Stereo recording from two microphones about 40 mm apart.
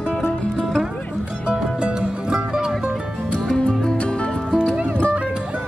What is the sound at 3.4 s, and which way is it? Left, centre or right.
Music, centre.